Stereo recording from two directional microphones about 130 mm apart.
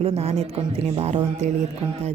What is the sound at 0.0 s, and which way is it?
Music, 50° right (ahead or behind).